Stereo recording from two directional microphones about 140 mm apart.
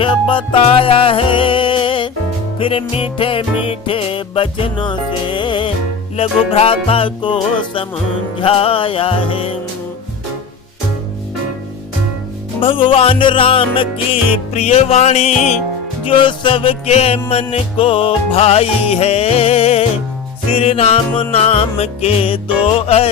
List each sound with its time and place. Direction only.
0.0 s music: 35° left (ahead or behind)
12.5 s music: 35° left (ahead or behind); by 15.5 s 55° left (ahead or behind)
16.0 s music: 35° left (ahead or behind)